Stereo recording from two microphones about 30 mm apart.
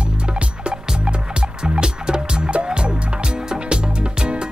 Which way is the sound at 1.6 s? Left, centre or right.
Right.